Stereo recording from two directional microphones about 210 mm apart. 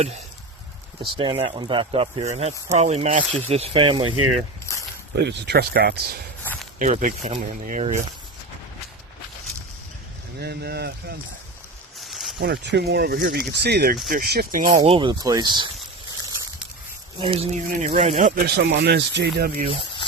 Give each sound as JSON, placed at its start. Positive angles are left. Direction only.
{"t": 1.0, "sound": "speech", "side_deg": -25}
{"t": 4.7, "sound": "snake", "side_deg": 15}
{"t": 5.1, "sound": "speech", "side_deg": -55}
{"t": 6.4, "sound": "walk", "side_deg": 10}
{"t": 6.7, "sound": "speech", "side_deg": -40}
{"t": 10.4, "sound": "speech", "side_deg": -50}
{"t": 11.9, "sound": "zipper", "side_deg": 0}
{"t": 12.4, "sound": "speech", "side_deg": -50}
{"t": 14.7, "sound": "speech", "side_deg": -20}
{"t": 17.2, "sound": "speech", "side_deg": -25}
{"t": 18.4, "sound": "speech", "side_deg": -50}